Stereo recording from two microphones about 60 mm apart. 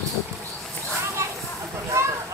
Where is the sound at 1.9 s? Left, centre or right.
Right.